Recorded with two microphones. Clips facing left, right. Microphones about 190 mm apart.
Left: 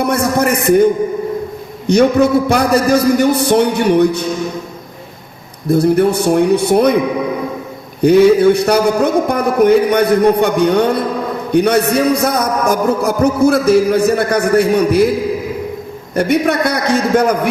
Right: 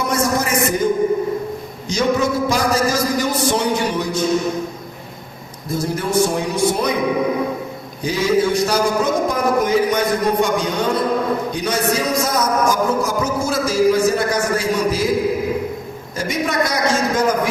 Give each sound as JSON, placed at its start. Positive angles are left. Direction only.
{"t": 0.0, "sound": "a sound", "side_deg": 60}
{"t": 1.9, "sound": "a man's voice", "side_deg": 60}
{"t": 5.6, "sound": "a man's voice", "side_deg": 60}
{"t": 8.0, "sound": "a man's voice", "side_deg": 60}
{"t": 16.1, "sound": "a man's voice", "side_deg": 60}